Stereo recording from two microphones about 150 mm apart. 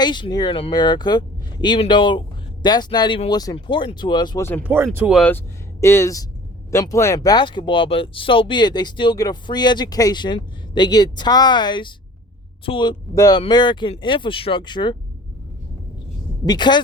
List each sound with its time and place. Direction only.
0.0 s speech: 30° left (ahead or behind)
4.6 s speech: 15° right (ahead or behind)
5.8 s speech: 20° left (ahead or behind)
16.5 s speech: 30° left (ahead or behind)